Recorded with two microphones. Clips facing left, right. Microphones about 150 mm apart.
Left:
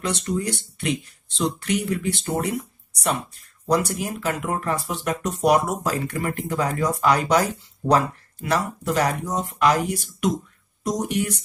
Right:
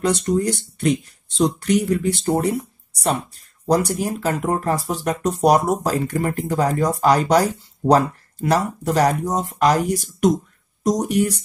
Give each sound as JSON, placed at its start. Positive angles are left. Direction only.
{"t": 0.0, "sound": "speech", "side_deg": -40}